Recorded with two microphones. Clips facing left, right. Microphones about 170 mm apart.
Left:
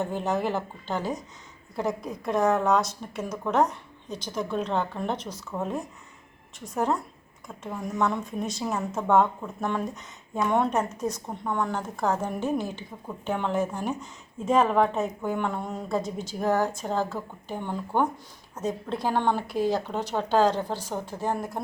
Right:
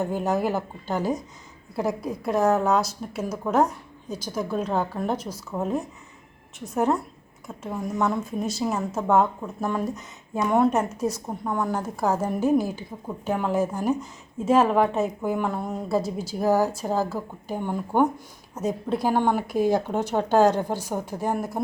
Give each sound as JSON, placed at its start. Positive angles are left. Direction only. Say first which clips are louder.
{"t": 0.0, "sound": "speech", "louder": "right 3 dB", "side_deg": -10}
{"t": 19.5, "sound": "speech", "louder": "right 3 dB", "side_deg": -45}
{"t": 19.7, "sound": "speech", "louder": "right 5 dB", "side_deg": -15}
{"t": 20.3, "sound": "speech", "louder": "right 3 dB", "side_deg": -45}
{"t": 20.6, "sound": "speech", "louder": "right 3 dB", "side_deg": -10}